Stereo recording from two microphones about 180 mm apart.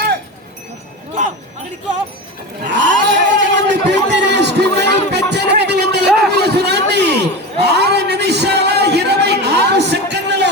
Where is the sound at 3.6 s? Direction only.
75° right (ahead or behind).